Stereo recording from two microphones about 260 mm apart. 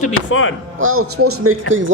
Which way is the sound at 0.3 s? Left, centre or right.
Left.